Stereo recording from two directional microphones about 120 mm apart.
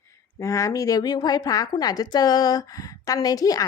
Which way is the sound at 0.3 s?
25° left (ahead or behind).